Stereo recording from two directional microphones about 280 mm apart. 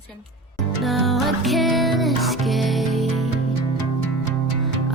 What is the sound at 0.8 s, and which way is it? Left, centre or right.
Music, centre.